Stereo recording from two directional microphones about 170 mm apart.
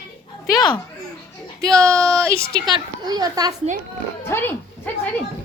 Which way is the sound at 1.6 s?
20° right (ahead or behind).